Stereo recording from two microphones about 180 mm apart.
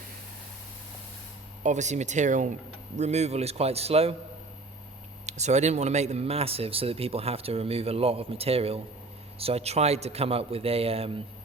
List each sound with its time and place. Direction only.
1.6 s speech: 40° right (ahead or behind)
5.2 s speech: 40° right (ahead or behind)